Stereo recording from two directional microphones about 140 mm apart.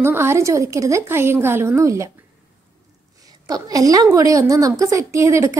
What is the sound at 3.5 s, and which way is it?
A woman's voice, 25° right (ahead or behind).